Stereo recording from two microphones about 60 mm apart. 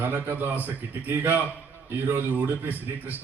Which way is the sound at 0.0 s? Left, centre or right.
Right.